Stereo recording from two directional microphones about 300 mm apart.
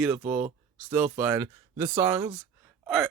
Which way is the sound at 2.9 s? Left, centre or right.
Centre.